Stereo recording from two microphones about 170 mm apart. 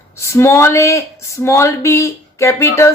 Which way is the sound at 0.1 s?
15° left (ahead or behind).